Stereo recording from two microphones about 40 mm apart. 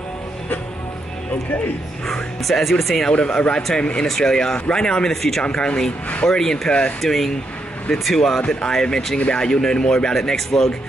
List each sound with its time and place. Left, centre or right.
2.0 s speech: centre
3.1 s speech: left
5.1 s speech: centre
5.4 s speech: left
7.0 s speech: centre